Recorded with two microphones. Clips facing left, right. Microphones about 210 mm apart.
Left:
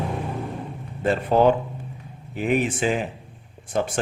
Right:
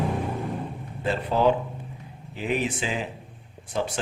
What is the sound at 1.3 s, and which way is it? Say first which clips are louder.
A man's voice: left 4 dB; 55° left (ahead or behind).